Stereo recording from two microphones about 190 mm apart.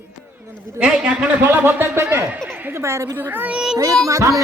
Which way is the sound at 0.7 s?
5° right (ahead or behind).